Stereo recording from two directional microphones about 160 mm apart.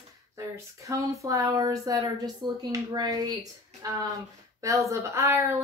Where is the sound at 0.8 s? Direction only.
20° right (ahead or behind).